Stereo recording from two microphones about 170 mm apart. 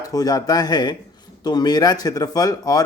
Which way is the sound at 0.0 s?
20° left (ahead or behind).